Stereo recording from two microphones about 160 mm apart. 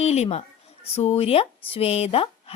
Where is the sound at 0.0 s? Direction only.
45° left (ahead or behind).